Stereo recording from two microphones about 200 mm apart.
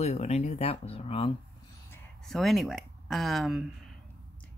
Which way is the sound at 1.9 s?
5° left (ahead or behind).